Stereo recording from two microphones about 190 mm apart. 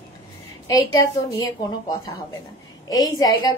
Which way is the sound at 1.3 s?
20° left (ahead or behind).